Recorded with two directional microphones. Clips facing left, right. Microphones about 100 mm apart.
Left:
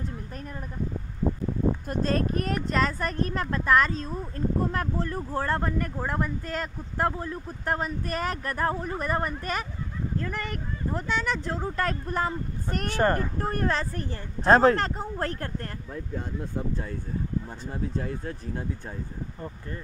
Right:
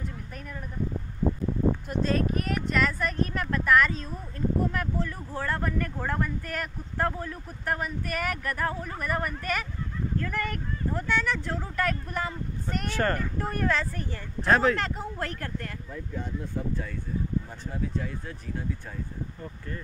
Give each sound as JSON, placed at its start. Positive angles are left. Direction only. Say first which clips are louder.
{"t": 1.9, "sound": "speech", "louder": "even", "side_deg": 40}
{"t": 12.9, "sound": "speech", "louder": "left 4 dB", "side_deg": 20}
{"t": 17.9, "sound": "speech", "louder": "left 2 dB", "side_deg": 40}